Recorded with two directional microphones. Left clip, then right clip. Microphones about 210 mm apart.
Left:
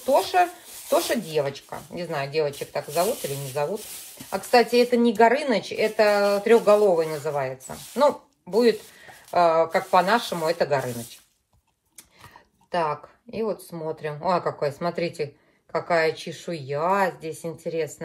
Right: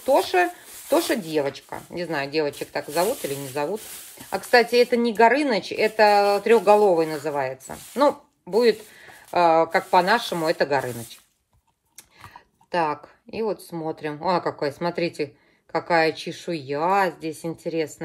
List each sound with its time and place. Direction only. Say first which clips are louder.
0.0 s speech: right 1 dB; 40° right (ahead or behind)
4.5 s speech: right 1 dB; 40° right (ahead or behind)
9.3 s speech: right 1 dB; 40° right (ahead or behind)
12.7 s speech: right 1 dB; 40° right (ahead or behind)